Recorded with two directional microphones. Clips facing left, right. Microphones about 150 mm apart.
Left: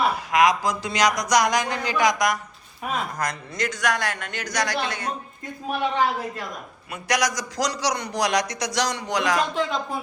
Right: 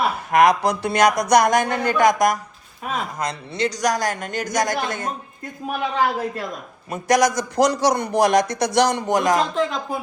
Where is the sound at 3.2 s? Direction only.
30° right (ahead or behind); by 5.1 s 45° right (ahead or behind).